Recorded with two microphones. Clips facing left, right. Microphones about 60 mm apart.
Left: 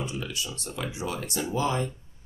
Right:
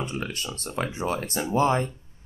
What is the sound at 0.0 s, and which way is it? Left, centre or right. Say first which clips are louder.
Speech: right 2 dB; right.